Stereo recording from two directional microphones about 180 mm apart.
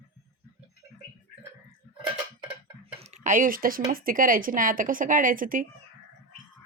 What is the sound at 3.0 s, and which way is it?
Speech, 40° right (ahead or behind).